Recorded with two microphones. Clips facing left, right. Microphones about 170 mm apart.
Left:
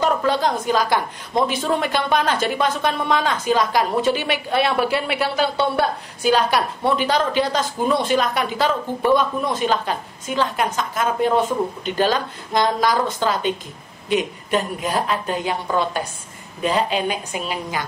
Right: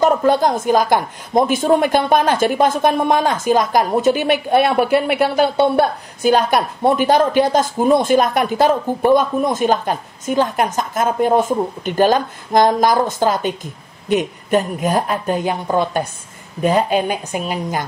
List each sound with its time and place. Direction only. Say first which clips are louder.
0.0 s a woman's voice: right 5 dB; 45° right (ahead or behind)